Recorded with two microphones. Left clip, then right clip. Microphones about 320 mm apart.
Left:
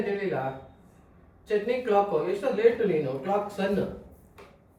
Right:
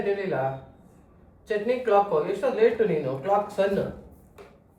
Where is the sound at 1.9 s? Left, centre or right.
Centre.